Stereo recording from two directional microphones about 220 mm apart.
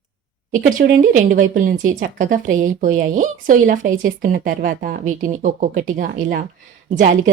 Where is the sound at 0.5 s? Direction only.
40° right (ahead or behind).